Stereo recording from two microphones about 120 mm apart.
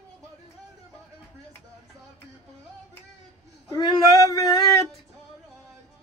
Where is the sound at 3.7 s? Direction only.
30° left (ahead or behind).